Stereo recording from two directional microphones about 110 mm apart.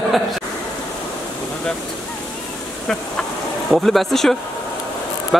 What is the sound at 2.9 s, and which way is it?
A man's voice, 5° left (ahead or behind).